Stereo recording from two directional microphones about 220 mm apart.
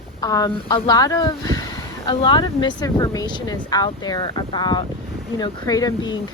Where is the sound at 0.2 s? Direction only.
15° left (ahead or behind).